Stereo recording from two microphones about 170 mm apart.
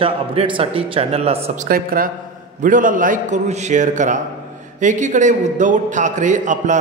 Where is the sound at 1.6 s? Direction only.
60° right (ahead or behind).